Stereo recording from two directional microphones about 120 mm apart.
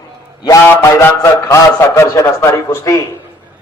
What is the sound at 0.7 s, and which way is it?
A man's voice, 20° left (ahead or behind).